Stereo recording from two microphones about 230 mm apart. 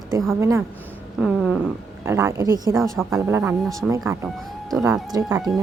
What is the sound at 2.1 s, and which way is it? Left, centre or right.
A woman's voice, centre.